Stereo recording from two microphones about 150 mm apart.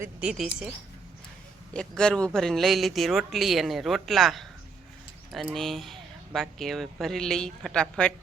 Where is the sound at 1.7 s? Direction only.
5° left (ahead or behind).